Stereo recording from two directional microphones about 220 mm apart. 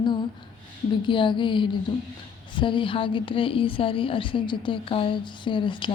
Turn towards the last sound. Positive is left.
turn(degrees=20)  # may be behind; listen again after turning